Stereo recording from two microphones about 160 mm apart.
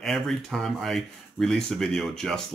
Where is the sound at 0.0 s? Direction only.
Centre (ahead or behind).